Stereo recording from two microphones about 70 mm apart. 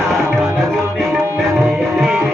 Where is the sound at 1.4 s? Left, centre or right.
Centre.